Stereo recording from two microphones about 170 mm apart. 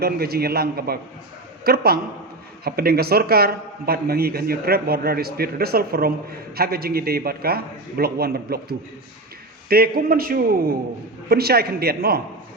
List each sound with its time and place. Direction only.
0.0 s a man's voice: 65° right (ahead or behind)
9.6 s a man's voice: 60° right (ahead or behind)